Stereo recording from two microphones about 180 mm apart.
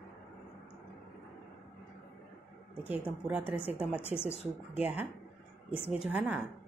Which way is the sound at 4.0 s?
10° left (ahead or behind).